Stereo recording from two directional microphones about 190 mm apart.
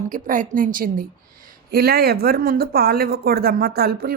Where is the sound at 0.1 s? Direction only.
45° right (ahead or behind).